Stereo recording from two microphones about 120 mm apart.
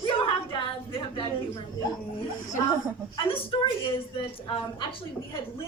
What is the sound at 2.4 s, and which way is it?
Speech, 25° left (ahead or behind).